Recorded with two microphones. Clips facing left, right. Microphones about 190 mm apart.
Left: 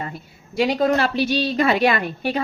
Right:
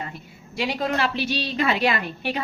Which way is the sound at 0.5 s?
40° left (ahead or behind).